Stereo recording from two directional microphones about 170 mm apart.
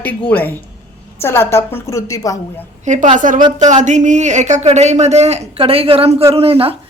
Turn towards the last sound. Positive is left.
turn(degrees=-35)  # may be behind; listen again after turning